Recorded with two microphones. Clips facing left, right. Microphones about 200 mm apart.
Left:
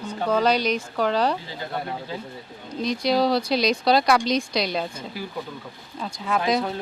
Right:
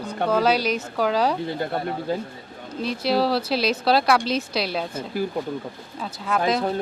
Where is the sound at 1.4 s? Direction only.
50° right (ahead or behind).